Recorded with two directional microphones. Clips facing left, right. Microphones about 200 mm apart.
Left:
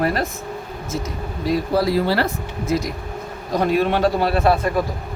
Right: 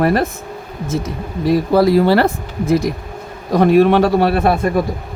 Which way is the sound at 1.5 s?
55° right (ahead or behind).